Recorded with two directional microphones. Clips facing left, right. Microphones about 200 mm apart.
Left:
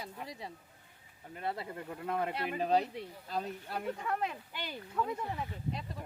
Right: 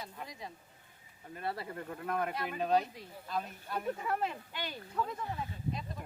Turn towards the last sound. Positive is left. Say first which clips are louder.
# left 2 dB
turn(degrees=10)  # may be behind; listen again after turning